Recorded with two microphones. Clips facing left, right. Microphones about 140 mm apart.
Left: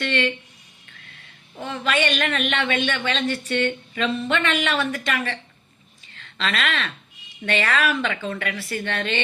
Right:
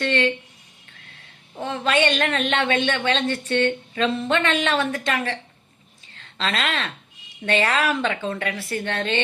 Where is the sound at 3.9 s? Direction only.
30° right (ahead or behind).